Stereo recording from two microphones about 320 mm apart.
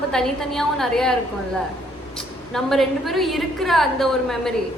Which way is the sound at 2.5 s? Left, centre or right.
Centre.